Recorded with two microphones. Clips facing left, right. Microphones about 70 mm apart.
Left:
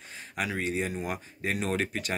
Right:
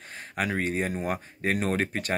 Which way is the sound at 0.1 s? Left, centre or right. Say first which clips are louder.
Right 3 dB; right.